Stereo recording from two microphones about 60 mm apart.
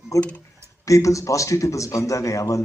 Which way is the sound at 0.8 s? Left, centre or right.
Left.